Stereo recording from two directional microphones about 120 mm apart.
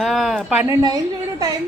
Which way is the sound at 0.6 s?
30° right (ahead or behind).